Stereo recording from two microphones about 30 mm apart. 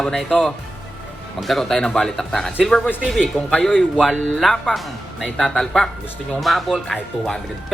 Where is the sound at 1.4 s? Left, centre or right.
Centre.